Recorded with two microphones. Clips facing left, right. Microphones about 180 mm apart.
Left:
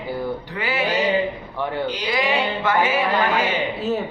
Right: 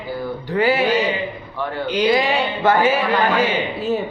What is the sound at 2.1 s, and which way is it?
Music, 30° right (ahead or behind).